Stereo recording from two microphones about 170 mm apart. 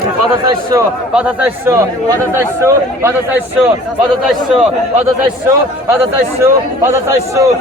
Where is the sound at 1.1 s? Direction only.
10° right (ahead or behind).